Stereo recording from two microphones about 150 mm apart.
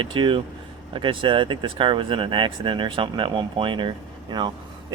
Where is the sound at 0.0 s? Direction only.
35° right (ahead or behind).